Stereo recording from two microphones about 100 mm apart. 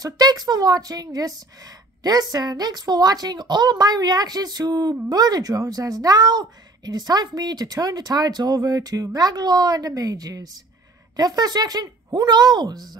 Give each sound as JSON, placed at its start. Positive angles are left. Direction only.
{"t": 0.0, "sound": "a woman's voice", "side_deg": -40}